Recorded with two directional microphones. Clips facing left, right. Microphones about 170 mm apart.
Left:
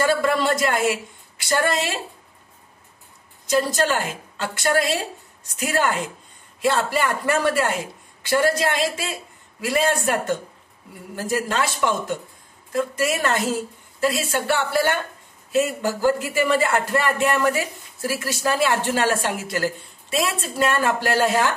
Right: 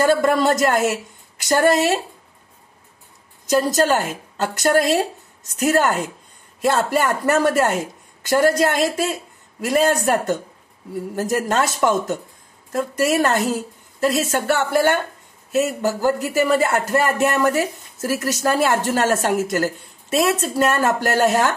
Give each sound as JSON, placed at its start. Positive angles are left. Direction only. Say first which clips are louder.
{"t": 0.0, "sound": "speech", "louder": "right 4 dB", "side_deg": -45}
{"t": 3.4, "sound": "a woman's voice", "louder": "right 3 dB", "side_deg": -40}
{"t": 12.7, "sound": "speech", "louder": "right 4 dB", "side_deg": -45}